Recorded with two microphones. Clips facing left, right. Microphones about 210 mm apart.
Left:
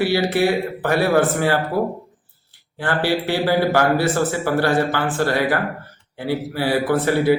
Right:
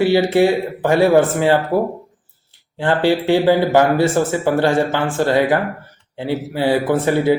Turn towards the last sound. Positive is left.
turn(degrees=-20)  # may be behind; listen again after turning